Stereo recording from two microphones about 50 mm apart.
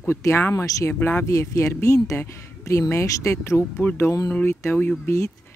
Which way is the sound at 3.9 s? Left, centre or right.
Left.